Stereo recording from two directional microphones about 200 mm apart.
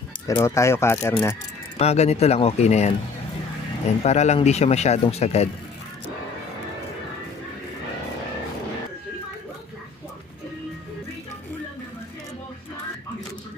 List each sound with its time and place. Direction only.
0.3 s speech: 15° left (ahead or behind)
1.8 s speech: 30° left (ahead or behind)